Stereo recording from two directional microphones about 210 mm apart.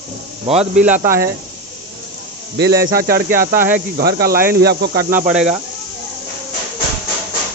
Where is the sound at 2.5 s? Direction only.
50° right (ahead or behind).